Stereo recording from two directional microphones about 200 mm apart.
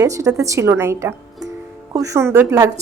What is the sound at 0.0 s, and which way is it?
A woman's voice, 15° right (ahead or behind).